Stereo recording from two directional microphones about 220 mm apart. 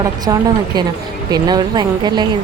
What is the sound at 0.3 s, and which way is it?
A woman's voice, 20° right (ahead or behind).